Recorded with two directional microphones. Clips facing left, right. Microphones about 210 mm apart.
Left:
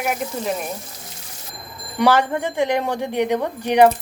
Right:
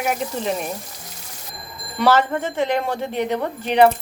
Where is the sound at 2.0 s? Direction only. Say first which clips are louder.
Even; 15° left (ahead or behind).